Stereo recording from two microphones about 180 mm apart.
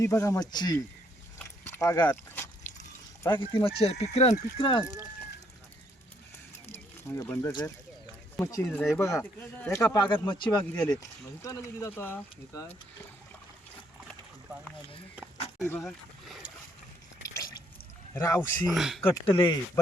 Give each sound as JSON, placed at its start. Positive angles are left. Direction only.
{"t": 0.0, "sound": "speech", "side_deg": 15}
{"t": 1.5, "sound": "a sound", "side_deg": 15}
{"t": 3.2, "sound": "speech", "side_deg": 25}
{"t": 4.7, "sound": "speech", "side_deg": 20}
{"t": 6.7, "sound": "a sound", "side_deg": 10}
{"t": 8.4, "sound": "speech", "side_deg": 15}
{"t": 8.6, "sound": "speech", "side_deg": 5}
{"t": 8.9, "sound": "speech", "side_deg": 15}
{"t": 15.8, "sound": "a sound", "side_deg": 0}
{"t": 17.2, "sound": "drip", "side_deg": 20}
{"t": 18.1, "sound": "speech", "side_deg": 15}
{"t": 18.7, "sound": "speech", "side_deg": 0}
{"t": 19.4, "sound": "speech", "side_deg": 25}